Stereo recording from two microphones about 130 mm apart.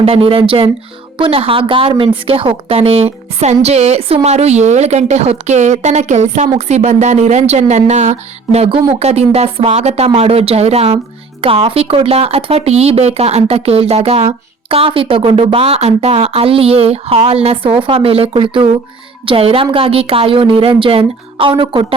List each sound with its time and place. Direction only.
0.0 s a woman's voice: 45° right (ahead or behind)